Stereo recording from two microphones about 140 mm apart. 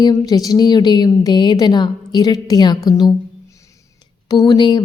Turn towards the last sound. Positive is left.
turn(degrees=30)  # may be behind; listen again after turning